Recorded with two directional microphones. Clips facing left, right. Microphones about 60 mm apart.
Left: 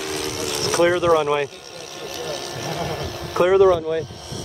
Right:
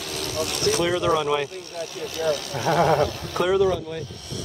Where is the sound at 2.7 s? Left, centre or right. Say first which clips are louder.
Right 10 dB; right.